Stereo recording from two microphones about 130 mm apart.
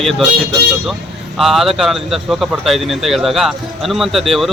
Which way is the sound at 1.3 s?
Centre (ahead or behind).